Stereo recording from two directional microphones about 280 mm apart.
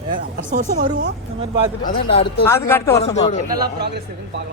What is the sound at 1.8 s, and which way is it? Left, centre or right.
Speech, left.